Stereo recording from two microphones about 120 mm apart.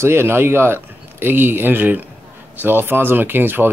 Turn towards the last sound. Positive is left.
turn(degrees=-15)  # may be behind; listen again after turning